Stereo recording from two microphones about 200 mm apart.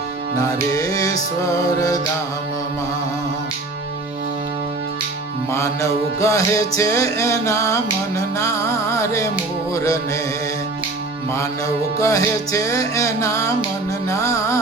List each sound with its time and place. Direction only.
0.4 s music: 15° left (ahead or behind)
5.5 s music: 15° left (ahead or behind)
11.9 s music: 15° left (ahead or behind)